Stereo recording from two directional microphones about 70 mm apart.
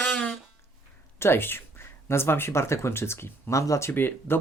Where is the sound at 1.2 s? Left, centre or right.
Left.